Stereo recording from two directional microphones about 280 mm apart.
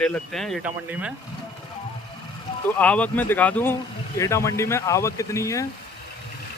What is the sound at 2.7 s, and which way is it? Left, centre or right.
Speech, centre.